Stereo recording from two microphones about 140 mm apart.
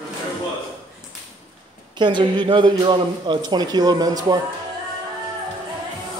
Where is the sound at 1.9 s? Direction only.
35° right (ahead or behind).